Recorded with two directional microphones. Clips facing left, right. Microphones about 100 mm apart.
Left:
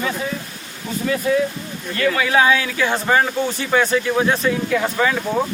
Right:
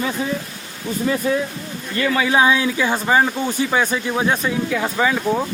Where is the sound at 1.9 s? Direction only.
20° right (ahead or behind).